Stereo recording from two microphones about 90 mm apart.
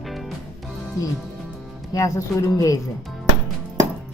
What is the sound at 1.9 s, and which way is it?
Speech, 35° left (ahead or behind).